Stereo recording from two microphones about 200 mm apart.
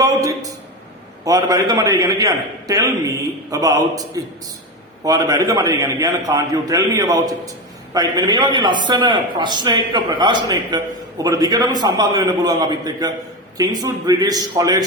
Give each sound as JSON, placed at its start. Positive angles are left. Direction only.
{"t": 0.0, "sound": "a man's voice", "side_deg": -15}